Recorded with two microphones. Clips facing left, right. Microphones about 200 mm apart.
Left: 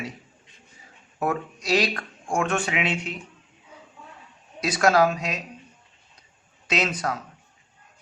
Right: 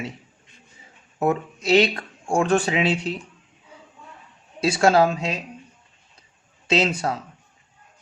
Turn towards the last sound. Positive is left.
turn(degrees=-30)  # may be behind; listen again after turning